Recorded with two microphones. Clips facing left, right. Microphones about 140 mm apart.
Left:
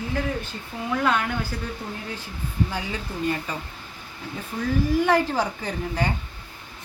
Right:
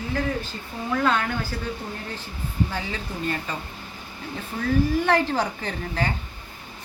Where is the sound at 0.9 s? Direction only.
5° left (ahead or behind).